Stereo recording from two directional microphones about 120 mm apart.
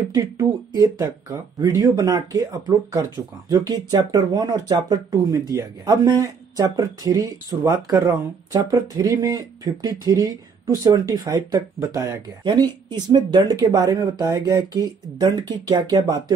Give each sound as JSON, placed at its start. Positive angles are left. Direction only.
{"t": 0.1, "sound": "speech", "side_deg": -30}
{"t": 8.5, "sound": "speech", "side_deg": -35}